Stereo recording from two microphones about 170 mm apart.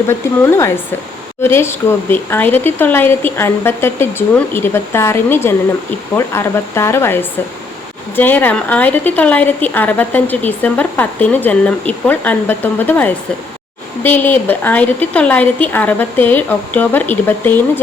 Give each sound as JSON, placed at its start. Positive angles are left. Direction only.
{"t": 0.1, "sound": "a woman's voice", "side_deg": 15}